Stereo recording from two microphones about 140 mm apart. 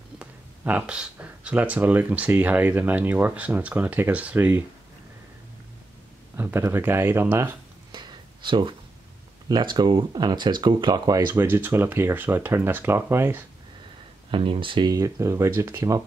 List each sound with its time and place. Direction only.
0.2 s speech: 10° right (ahead or behind)
6.3 s speech: 15° right (ahead or behind)
7.9 s a sound: 30° right (ahead or behind)
9.5 s speech: 30° right (ahead or behind)
11.4 s speech: 15° right (ahead or behind)
14.3 s speech: 35° right (ahead or behind); by 16.0 s 20° right (ahead or behind)